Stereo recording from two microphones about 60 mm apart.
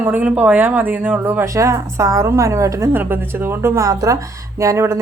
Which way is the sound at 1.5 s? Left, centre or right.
Right.